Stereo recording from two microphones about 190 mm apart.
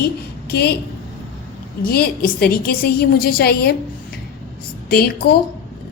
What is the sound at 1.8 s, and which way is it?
A woman's voice, 55° left (ahead or behind).